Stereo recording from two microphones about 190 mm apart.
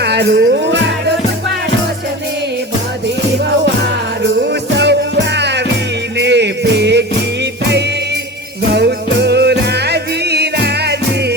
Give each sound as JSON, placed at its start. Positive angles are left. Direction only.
{"t": 0.0, "sound": "music", "side_deg": -60}
{"t": 4.2, "sound": "music", "side_deg": -65}